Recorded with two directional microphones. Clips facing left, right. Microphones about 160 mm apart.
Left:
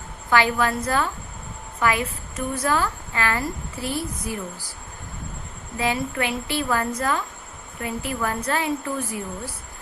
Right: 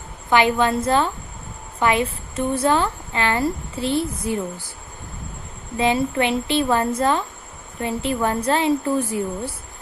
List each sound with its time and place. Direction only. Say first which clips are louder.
0.3 s a woman's voice: right 3 dB; 20° right (ahead or behind)
5.7 s a woman's voice: right 5 dB; 25° right (ahead or behind)